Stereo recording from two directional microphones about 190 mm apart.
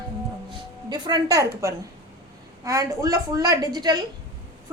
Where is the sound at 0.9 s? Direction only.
20° right (ahead or behind).